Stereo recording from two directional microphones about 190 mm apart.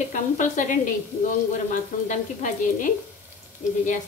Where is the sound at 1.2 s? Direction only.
40° left (ahead or behind).